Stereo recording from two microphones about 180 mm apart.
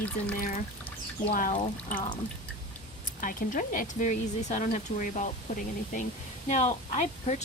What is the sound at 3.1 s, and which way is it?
Speech, 45° left (ahead or behind).